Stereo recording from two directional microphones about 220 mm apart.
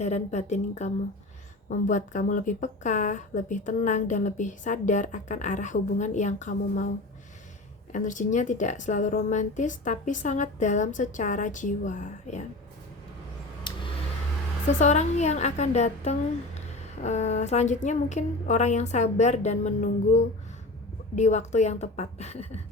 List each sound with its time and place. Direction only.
0.0 s speech: 30° left (ahead or behind)
7.9 s speech: 35° left (ahead or behind)
13.7 s a sound: 20° left (ahead or behind)
14.8 s speech: 30° left (ahead or behind)